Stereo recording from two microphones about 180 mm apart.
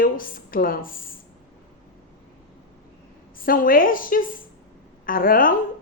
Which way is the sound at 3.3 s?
50° left (ahead or behind).